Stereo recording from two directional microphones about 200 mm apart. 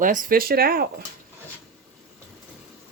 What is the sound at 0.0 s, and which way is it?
Speech, 40° right (ahead or behind).